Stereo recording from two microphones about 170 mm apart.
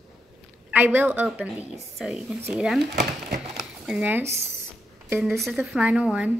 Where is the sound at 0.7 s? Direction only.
10° right (ahead or behind).